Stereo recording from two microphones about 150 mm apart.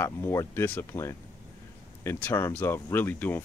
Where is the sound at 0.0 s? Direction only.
15° left (ahead or behind).